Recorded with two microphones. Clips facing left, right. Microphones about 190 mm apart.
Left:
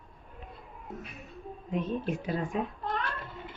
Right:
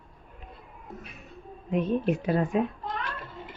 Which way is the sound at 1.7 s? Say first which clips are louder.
Right 6 dB; 65° right (ahead or behind).